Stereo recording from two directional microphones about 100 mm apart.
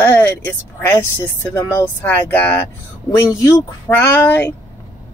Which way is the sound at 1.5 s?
35° left (ahead or behind).